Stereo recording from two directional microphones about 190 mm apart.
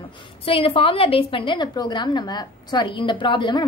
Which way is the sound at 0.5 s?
30° left (ahead or behind).